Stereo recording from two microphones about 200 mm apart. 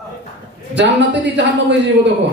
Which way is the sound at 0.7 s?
60° right (ahead or behind).